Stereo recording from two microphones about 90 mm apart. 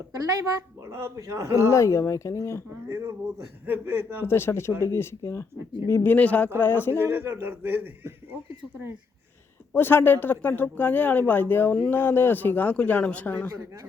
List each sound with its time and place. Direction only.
0.8 s speech: 35° right (ahead or behind)
1.7 s speech: 35° left (ahead or behind)
2.9 s speech: 35° right (ahead or behind)
4.3 s speech: 30° left (ahead or behind)
7.0 s speech: 25° right (ahead or behind)
9.7 s speech: 25° left (ahead or behind)
13.5 s speech: 35° right (ahead or behind)